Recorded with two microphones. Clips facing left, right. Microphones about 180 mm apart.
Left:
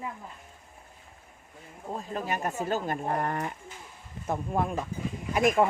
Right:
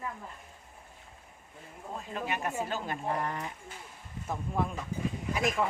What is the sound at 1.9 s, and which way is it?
Speech, 40° left (ahead or behind).